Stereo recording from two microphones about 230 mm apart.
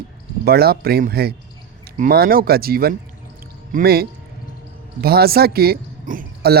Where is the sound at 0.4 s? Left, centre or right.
Right.